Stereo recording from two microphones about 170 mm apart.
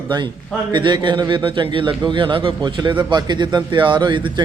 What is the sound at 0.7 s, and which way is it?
A man's voice, 25° right (ahead or behind).